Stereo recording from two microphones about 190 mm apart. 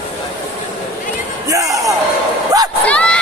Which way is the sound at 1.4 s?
15° right (ahead or behind).